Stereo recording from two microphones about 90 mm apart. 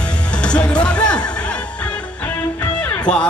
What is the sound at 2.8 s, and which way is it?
Music, 10° left (ahead or behind).